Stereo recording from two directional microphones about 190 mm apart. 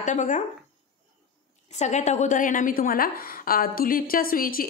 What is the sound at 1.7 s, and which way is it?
A woman's voice, 35° left (ahead or behind).